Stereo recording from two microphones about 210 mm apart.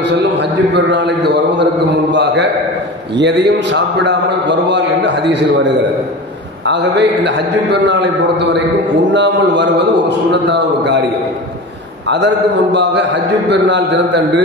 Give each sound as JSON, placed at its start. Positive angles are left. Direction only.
{"t": 0.0, "sound": "a man's voice", "side_deg": -55}
{"t": 12.7, "sound": "a man's voice", "side_deg": -60}